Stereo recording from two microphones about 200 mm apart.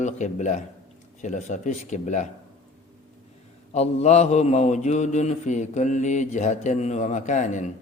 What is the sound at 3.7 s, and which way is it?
Mantra, 35° left (ahead or behind).